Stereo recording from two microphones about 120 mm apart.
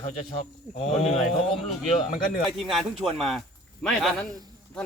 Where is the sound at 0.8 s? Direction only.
80° left.